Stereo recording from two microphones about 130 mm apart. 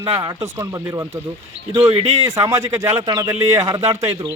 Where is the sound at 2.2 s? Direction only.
25° right (ahead or behind).